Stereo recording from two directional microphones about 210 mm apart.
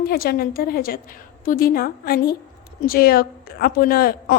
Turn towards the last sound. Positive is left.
turn(degrees=45)  # may be behind; listen again after turning